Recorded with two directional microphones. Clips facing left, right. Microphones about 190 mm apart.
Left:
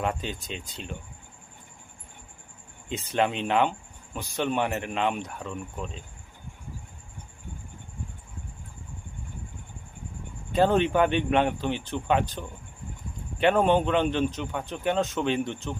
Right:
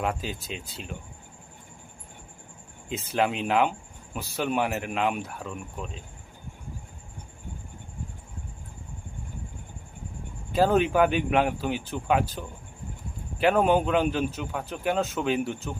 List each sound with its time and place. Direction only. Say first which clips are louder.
0.0 s speech: even; 5° right (ahead or behind)
2.9 s speech: even; 5° right (ahead or behind)
10.5 s speech: even; 5° right (ahead or behind)